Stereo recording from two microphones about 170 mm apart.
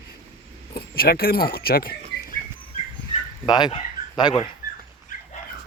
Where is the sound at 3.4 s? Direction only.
25° left (ahead or behind).